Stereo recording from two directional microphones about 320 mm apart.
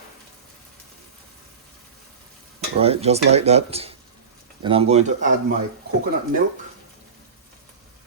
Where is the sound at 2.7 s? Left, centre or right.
Centre.